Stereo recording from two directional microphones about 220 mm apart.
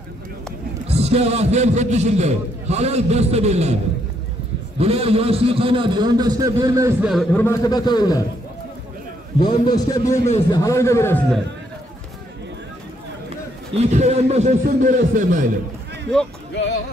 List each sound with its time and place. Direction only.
0.8 s a man's voice: 30° right (ahead or behind)
4.7 s a man's voice: 25° right (ahead or behind); by 7.4 s centre (ahead or behind)
7.4 s a man's voice: 15° left (ahead or behind)
9.4 s a man's voice: 20° left (ahead or behind)
10.2 s a man's voice: 30° left (ahead or behind)
10.6 s a man's voice: 15° left (ahead or behind)
13.7 s a man's voice: 30° right (ahead or behind)
16.5 s speech: 55° left (ahead or behind)